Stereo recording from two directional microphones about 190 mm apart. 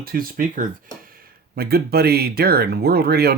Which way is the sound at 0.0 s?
50° right (ahead or behind).